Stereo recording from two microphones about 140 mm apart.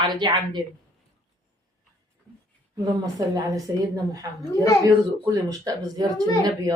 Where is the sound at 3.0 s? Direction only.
25° right (ahead or behind).